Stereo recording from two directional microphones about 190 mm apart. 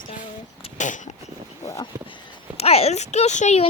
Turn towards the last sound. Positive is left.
turn(degrees=35)  # may be behind; listen again after turning